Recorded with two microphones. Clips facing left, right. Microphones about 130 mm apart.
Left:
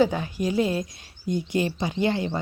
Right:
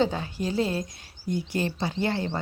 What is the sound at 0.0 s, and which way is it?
Speech, 15° left (ahead or behind).